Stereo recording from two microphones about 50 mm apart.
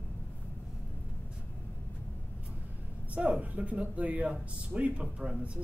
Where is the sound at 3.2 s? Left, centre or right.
Right.